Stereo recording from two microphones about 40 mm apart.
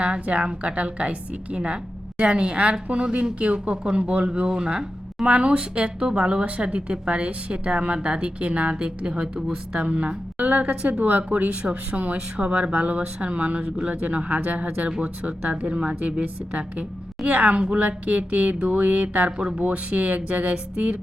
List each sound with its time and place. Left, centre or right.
0.0 s a woman's voice: right